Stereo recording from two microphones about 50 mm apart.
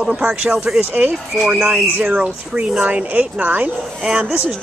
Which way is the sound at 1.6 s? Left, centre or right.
Right.